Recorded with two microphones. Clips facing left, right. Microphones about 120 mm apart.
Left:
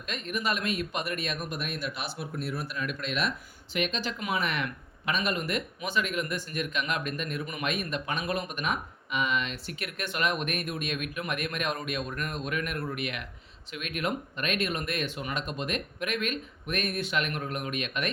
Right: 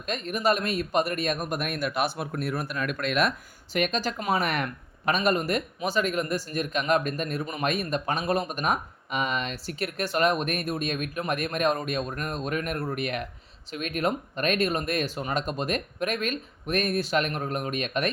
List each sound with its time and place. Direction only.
0.0 s speech: 40° right (ahead or behind)